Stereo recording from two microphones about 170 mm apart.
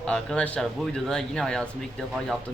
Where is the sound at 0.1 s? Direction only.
5° left (ahead or behind).